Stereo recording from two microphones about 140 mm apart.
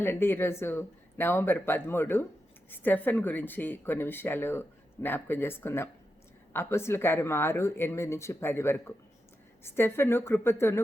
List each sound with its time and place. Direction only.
0.0 s speech: 15° left (ahead or behind)